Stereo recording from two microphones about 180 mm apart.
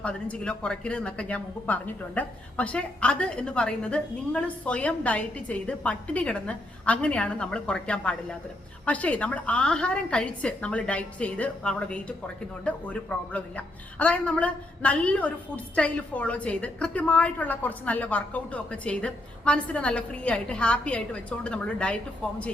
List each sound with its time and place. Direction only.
0.0 s a woman's voice: 5° left (ahead or behind)